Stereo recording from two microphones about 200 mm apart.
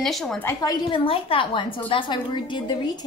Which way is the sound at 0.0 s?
Centre (ahead or behind).